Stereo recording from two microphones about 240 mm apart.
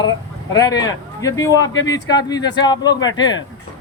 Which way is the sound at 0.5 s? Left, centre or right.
Centre.